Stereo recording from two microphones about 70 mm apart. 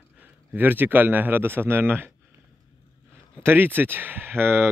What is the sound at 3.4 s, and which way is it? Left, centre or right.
Speech, right.